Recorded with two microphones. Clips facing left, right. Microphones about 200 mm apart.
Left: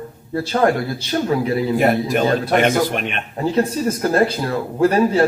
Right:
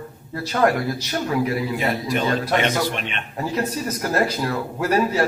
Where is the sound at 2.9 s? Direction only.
50° left (ahead or behind).